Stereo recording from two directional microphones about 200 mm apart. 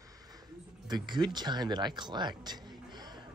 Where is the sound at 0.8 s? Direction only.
20° right (ahead or behind).